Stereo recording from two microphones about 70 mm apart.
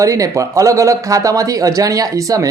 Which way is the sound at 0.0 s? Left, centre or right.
Right.